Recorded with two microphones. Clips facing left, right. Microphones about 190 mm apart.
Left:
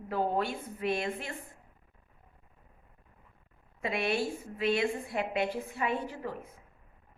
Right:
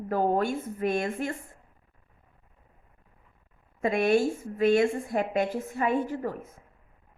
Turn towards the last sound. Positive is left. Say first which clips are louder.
# right 7 dB
turn(degrees=-45)  # may be behind; listen again after turning